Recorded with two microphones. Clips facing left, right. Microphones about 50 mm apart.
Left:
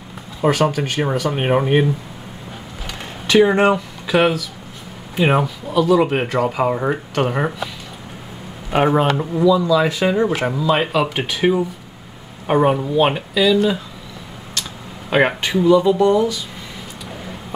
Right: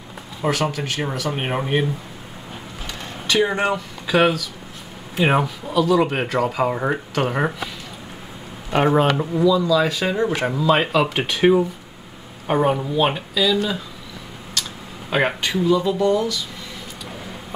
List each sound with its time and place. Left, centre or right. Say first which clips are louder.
0.4 s speech: left 5 dB; centre
2.9 s a sound: left 6 dB; centre
3.5 s speech: left 6 dB; left
4.1 s speech: left 1 dB; centre; by 10.2 s left
10.2 s speech: left 1 dB; centre
12.4 s speech: left 3 dB; centre
15.0 s speech: left 4 dB; centre
16.0 s speech: left 4 dB; centre